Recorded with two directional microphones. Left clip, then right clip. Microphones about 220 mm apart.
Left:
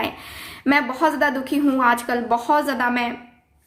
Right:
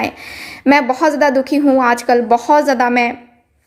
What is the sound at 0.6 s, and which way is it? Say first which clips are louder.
A woman's voice: right 7 dB; 25° right (ahead or behind).